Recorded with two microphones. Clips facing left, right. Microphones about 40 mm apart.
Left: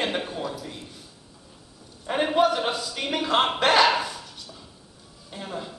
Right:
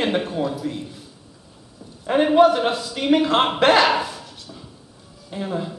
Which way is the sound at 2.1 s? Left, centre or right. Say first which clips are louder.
Right 7 dB; centre.